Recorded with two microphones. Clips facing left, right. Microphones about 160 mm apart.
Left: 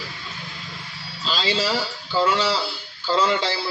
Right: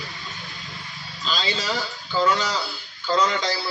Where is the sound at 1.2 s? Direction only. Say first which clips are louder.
Left 3 dB; 35° left (ahead or behind).